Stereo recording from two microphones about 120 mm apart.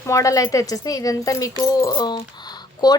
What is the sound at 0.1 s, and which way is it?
Speech, 25° left (ahead or behind).